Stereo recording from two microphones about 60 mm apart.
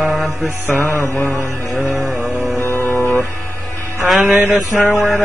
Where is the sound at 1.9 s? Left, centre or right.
Centre.